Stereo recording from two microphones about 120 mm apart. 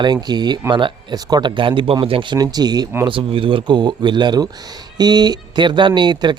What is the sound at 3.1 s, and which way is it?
A man's voice, 50° right (ahead or behind).